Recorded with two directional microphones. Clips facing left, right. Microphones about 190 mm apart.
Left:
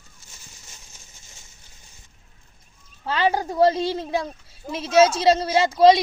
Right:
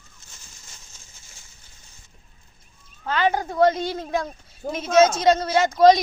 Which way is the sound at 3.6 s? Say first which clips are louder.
Left 1 dB; 30° left (ahead or behind).